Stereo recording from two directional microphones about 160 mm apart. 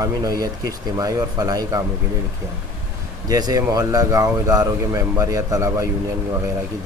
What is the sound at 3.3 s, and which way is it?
Speech, 20° right (ahead or behind).